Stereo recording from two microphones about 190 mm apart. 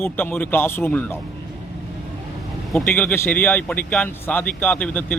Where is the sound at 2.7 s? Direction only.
Centre (ahead or behind).